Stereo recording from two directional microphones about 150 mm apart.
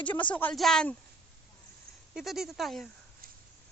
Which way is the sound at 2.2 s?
5° right (ahead or behind).